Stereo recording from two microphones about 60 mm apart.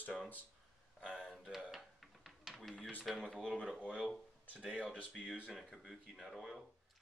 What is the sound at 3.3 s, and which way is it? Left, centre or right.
Speech, centre.